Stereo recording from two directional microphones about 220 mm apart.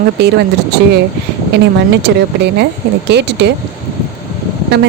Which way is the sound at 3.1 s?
50° right (ahead or behind).